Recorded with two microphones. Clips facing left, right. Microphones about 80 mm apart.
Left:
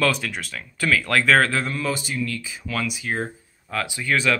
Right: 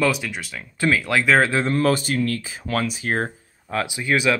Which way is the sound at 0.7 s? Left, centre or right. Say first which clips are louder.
Right 2 dB; right.